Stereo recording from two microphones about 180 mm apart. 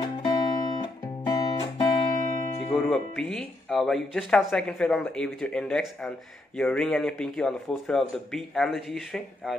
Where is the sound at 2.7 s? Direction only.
Centre (ahead or behind).